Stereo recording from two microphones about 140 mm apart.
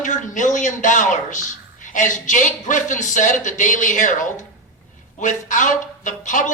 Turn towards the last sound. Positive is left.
turn(degrees=65)  # may be behind; listen again after turning